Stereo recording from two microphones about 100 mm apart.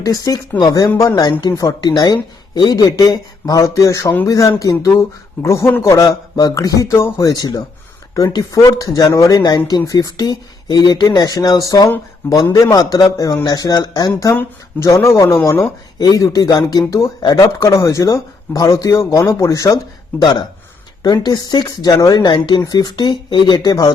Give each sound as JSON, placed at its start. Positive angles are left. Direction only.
{"t": 0.0, "sound": "speech", "side_deg": 40}
{"t": 12.2, "sound": "speech", "side_deg": 20}
{"t": 12.7, "sound": "speech", "side_deg": 40}
{"t": 16.0, "sound": "speech", "side_deg": 35}
{"t": 21.0, "sound": "speech", "side_deg": 45}